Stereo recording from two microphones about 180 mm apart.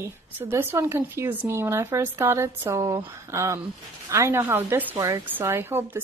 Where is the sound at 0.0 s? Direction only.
10° right (ahead or behind).